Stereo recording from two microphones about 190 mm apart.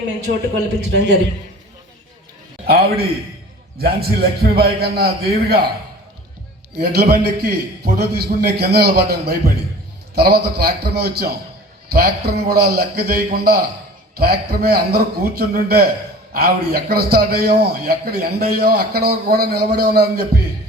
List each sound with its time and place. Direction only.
0.3 s a man's voice: 50° right (ahead or behind)
0.8 s a man's voice: 60° right (ahead or behind)
2.6 s a man's voice: 55° right (ahead or behind)
6.9 s a man's voice: 55° right (ahead or behind)